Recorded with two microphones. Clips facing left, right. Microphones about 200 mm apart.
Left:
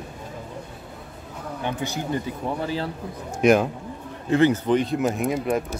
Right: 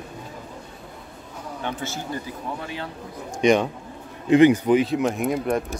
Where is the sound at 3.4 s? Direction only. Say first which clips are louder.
Left 1 dB; 5° left (ahead or behind).